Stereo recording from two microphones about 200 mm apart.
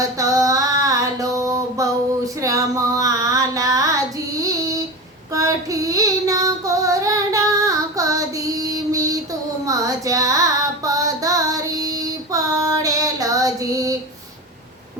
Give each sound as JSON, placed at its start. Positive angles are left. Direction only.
{"t": 0.2, "sound": "female singing", "side_deg": -15}
{"t": 9.6, "sound": "child singing", "side_deg": -15}